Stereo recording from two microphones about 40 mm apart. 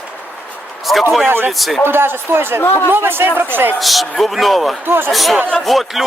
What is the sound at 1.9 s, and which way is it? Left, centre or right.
Speech, right.